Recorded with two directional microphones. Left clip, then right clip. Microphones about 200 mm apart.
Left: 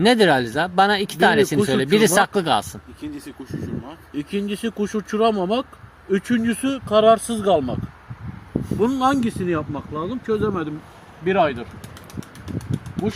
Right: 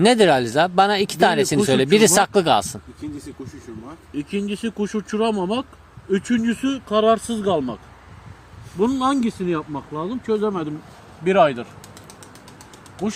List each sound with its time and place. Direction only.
0.0 s speech: 20° right (ahead or behind)
8.8 s speech: 20° right (ahead or behind); by 10.7 s 45° right (ahead or behind)
11.3 s speech: 65° right (ahead or behind)